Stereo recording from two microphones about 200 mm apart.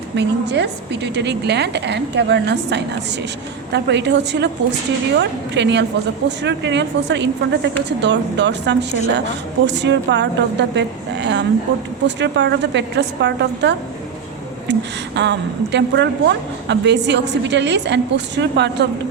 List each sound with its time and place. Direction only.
0.2 s a woman's voice: 60° right (ahead or behind)